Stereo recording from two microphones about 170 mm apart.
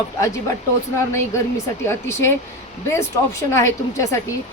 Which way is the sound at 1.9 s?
15° left (ahead or behind).